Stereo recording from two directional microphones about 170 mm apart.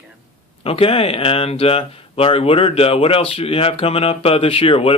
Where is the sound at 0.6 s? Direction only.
35° left (ahead or behind).